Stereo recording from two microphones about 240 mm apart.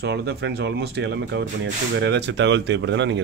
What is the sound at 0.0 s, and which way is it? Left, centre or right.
Speech, right.